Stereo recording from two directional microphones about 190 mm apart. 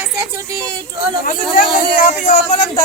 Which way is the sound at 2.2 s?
35° left (ahead or behind).